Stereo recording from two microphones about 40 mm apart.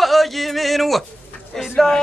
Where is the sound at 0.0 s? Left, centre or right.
Centre.